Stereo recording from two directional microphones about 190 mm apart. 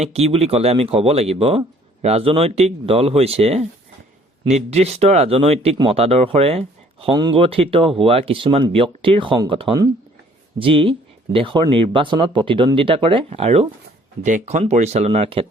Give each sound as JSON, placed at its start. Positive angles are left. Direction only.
{"t": 0.0, "sound": "speech", "side_deg": -35}